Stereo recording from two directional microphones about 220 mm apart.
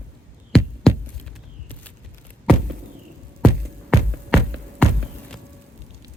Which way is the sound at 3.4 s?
5° left (ahead or behind).